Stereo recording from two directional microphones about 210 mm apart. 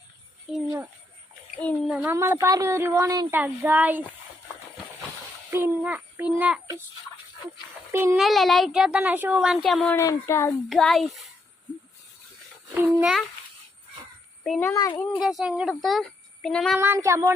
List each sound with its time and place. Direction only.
1.9 s speech: 10° right (ahead or behind)
5.5 s a child's voice: 10° right (ahead or behind)
7.9 s speech: 10° right (ahead or behind)
8.2 s a child's voice: centre (ahead or behind)
10.7 s a child's voice: centre (ahead or behind)
12.7 s speech: 5° right (ahead or behind)
14.6 s speech: 15° left (ahead or behind)
15.2 s a child's voice: centre (ahead or behind)
16.8 s speech: 15° right (ahead or behind)